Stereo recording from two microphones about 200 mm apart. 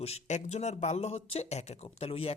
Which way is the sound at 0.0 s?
35° left (ahead or behind).